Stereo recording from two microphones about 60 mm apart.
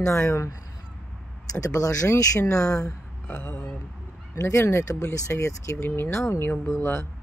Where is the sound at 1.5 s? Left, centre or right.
Left.